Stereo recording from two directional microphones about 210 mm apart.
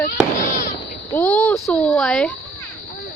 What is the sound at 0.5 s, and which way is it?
Fireworks, 35° left (ahead or behind).